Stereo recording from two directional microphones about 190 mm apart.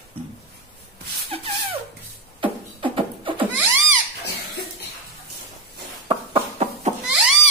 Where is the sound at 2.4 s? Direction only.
30° right (ahead or behind).